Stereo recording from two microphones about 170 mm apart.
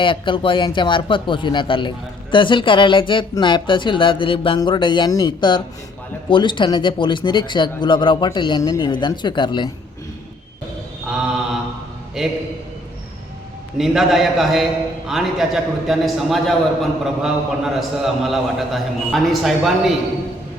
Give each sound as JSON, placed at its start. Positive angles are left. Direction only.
{"t": 0.0, "sound": "speech", "side_deg": 30}
{"t": 12.2, "sound": "a man's voice", "side_deg": 0}
{"t": 13.7, "sound": "a man's voice", "side_deg": 0}